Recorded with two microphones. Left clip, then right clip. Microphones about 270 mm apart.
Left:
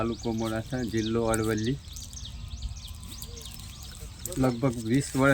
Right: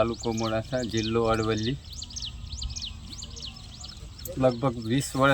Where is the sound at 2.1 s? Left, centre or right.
Right.